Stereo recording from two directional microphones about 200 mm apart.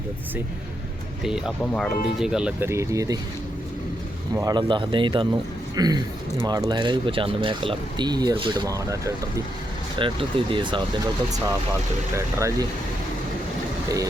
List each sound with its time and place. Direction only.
1.2 s speech: 5° right (ahead or behind)
4.4 s speech: 20° right (ahead or behind)
13.8 s speech: 15° right (ahead or behind)